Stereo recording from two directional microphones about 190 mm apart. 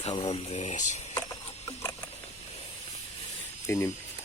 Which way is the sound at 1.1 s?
15° left (ahead or behind).